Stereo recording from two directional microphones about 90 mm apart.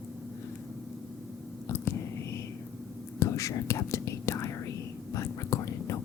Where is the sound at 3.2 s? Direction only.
35° left (ahead or behind).